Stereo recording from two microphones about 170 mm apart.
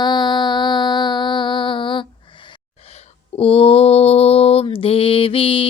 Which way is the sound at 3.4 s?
35° left (ahead or behind).